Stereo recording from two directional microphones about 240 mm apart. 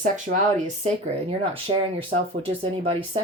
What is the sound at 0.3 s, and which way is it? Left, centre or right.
Speech, right.